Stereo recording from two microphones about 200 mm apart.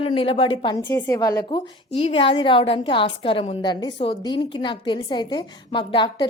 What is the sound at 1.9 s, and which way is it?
A woman's voice, 30° left (ahead or behind).